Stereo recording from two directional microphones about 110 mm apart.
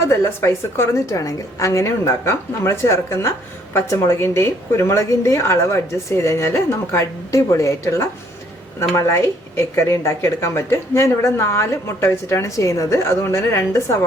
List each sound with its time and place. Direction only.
0.0 s speech: 25° left (ahead or behind)